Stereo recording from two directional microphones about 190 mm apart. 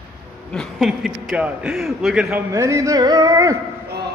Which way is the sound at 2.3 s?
15° right (ahead or behind).